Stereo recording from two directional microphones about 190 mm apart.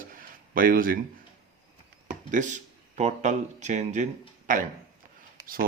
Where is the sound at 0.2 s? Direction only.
45° right (ahead or behind).